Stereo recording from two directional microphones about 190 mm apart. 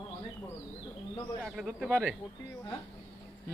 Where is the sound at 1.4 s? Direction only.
Centre (ahead or behind).